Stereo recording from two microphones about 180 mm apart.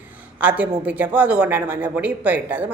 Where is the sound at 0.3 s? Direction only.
10° right (ahead or behind).